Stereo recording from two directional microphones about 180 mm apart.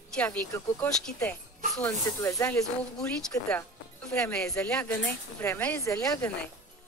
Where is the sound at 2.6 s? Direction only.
5° left (ahead or behind).